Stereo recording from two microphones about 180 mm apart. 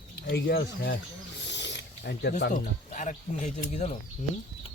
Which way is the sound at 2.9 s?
40° left (ahead or behind).